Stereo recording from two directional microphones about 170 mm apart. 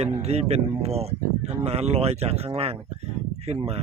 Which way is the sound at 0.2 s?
40° right (ahead or behind).